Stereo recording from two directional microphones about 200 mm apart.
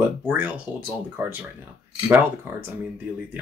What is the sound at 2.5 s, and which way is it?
Speech, 10° right (ahead or behind).